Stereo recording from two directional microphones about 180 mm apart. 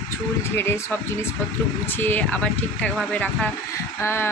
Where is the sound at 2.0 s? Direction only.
10° left (ahead or behind).